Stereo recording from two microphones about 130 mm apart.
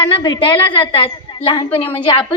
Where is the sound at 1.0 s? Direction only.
40° left (ahead or behind).